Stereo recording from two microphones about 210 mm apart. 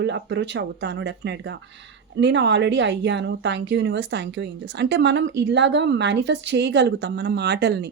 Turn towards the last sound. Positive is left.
turn(degrees=-50)  # may be behind; listen again after turning